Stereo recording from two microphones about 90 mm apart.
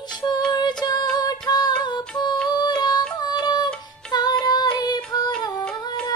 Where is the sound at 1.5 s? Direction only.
50° left (ahead or behind).